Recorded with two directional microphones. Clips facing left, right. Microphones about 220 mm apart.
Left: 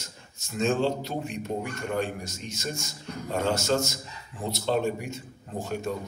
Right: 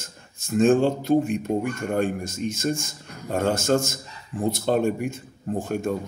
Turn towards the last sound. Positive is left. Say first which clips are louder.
# right 6 dB
turn(degrees=-50)  # may be behind; listen again after turning